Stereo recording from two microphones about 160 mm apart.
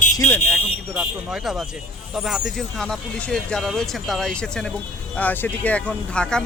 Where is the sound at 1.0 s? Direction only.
Centre (ahead or behind).